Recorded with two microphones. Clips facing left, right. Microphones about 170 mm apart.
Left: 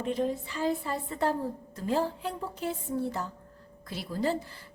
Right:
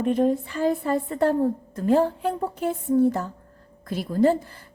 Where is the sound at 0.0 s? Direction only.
55° right (ahead or behind).